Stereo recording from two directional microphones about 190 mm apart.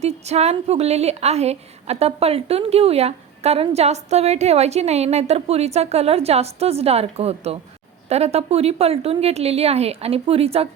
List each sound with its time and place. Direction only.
0.0 s a woman's voice: 35° right (ahead or behind)